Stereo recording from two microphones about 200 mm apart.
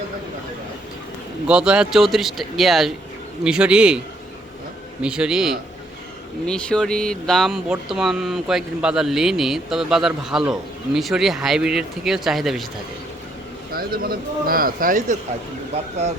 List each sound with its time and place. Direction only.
1.5 s speech: 5° right (ahead or behind)
5.0 s speech: 5° right (ahead or behind)
13.7 s speech: 50° right (ahead or behind)